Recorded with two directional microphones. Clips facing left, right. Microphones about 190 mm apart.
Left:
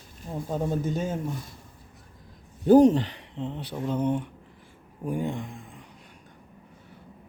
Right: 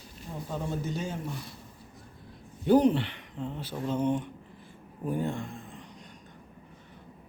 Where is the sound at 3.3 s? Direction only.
25° left (ahead or behind).